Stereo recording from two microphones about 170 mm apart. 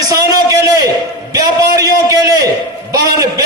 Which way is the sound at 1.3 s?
20° right (ahead or behind).